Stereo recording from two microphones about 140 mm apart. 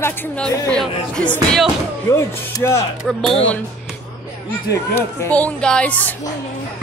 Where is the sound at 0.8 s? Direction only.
5° left (ahead or behind).